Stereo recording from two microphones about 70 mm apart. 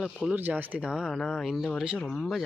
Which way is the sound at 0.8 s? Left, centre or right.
Centre.